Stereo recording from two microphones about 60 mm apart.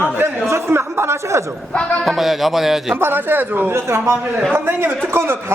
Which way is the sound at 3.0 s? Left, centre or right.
Right.